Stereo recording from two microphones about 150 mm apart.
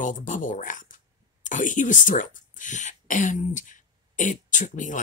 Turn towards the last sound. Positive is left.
turn(degrees=60)  # may be behind; listen again after turning